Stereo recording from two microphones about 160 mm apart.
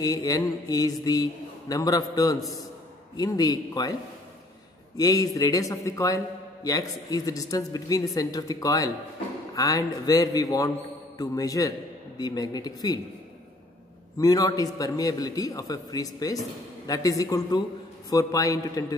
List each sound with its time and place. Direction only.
0.0 s a man's voice: 25° left (ahead or behind)
4.9 s a man's voice: 20° left (ahead or behind)
14.1 s a man's voice: 25° left (ahead or behind)